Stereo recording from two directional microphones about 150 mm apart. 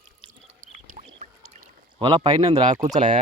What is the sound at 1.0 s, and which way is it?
Duck, 55° right (ahead or behind).